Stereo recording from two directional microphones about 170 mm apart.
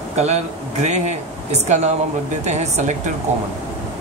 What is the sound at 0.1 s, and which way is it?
Speech, 40° right (ahead or behind).